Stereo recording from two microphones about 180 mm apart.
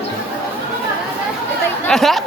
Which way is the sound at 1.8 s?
Centre (ahead or behind).